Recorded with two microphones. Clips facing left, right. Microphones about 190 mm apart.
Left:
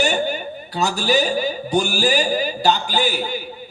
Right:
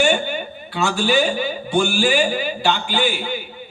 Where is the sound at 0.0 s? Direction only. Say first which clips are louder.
Right 1 dB; 40° left (ahead or behind).